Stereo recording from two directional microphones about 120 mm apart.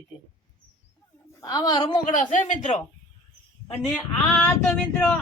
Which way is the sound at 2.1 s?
90° left.